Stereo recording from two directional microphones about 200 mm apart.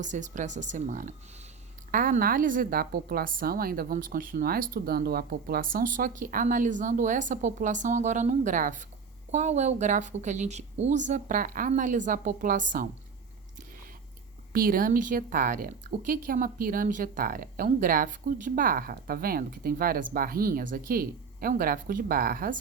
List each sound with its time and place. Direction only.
0.0 s a woman's voice: 40° right (ahead or behind)
14.5 s a woman's voice: 45° right (ahead or behind)